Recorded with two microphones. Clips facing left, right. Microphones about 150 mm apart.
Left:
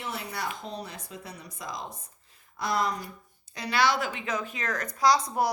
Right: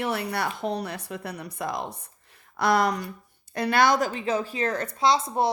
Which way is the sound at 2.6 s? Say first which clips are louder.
Right 6 dB; 70° right (ahead or behind).